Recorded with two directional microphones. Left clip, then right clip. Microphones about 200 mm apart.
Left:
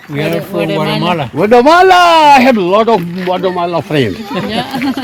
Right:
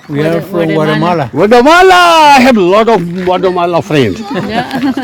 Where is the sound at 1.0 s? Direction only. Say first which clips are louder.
Right 3 dB; 30° right (ahead or behind).